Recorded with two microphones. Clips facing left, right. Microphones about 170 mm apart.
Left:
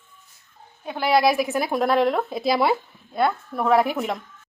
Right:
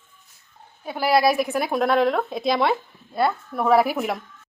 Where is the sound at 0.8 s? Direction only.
5° right (ahead or behind).